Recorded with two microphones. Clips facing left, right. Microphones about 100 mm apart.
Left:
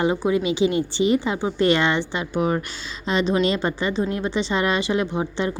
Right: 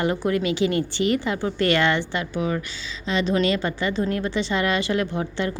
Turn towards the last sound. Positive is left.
turn(degrees=20)  # may be behind; listen again after turning